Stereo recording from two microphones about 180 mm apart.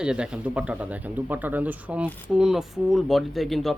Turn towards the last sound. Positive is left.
turn(degrees=0)  # may be behind; listen again after turning